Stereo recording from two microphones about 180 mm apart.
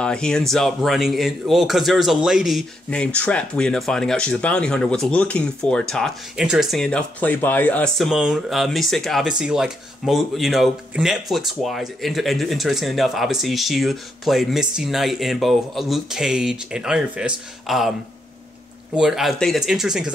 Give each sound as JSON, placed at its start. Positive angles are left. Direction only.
{"t": 0.0, "sound": "speech", "side_deg": 5}
{"t": 18.9, "sound": "speech", "side_deg": 0}